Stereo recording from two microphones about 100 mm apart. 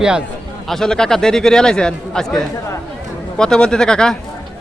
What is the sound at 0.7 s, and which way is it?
Speech, 5° left (ahead or behind).